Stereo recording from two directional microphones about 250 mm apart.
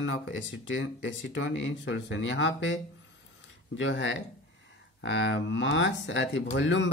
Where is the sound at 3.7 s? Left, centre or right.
Left.